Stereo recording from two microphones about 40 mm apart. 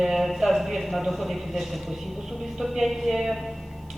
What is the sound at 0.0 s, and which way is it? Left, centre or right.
A man's voice, centre.